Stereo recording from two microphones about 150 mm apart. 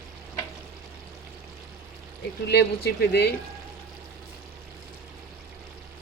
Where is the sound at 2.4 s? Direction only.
90° left.